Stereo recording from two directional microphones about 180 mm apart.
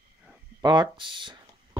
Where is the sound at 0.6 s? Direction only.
25° right (ahead or behind).